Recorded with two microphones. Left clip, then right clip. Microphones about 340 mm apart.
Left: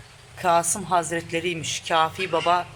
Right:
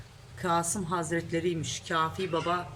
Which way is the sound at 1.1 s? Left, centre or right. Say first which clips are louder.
Left 4 dB; left.